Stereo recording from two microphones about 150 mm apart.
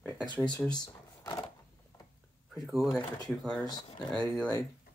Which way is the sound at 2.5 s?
Centre (ahead or behind).